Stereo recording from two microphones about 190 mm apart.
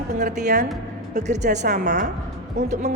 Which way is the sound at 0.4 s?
40° right (ahead or behind).